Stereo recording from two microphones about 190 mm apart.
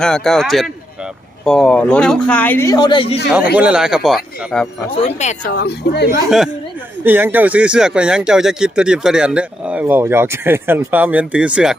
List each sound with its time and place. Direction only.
0.0 s a man's voice: centre (ahead or behind); by 3.2 s 25° left (ahead or behind)
3.2 s speech: 5° right (ahead or behind)
5.0 s speech: 35° left (ahead or behind)
5.5 s speech: 60° left (ahead or behind)
7.0 s speech: 10° right (ahead or behind)